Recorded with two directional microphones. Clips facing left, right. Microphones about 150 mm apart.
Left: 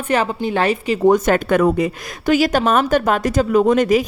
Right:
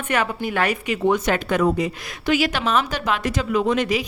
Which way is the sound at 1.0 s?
45° left (ahead or behind).